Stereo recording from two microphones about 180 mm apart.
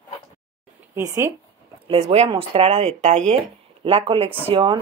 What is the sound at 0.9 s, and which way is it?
Speech, 15° right (ahead or behind).